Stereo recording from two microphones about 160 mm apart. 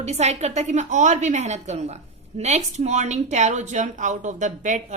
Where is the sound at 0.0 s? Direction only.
45° right (ahead or behind).